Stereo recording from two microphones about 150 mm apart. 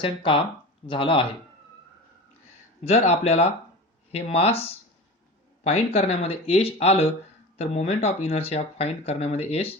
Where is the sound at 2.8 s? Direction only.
45° left (ahead or behind).